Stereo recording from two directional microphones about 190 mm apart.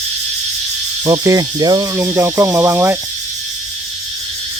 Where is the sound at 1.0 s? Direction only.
20° right (ahead or behind).